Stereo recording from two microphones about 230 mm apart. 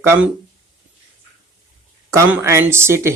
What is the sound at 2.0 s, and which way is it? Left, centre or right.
Speech, centre.